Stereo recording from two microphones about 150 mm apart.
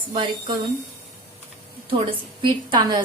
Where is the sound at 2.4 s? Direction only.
30° right (ahead or behind).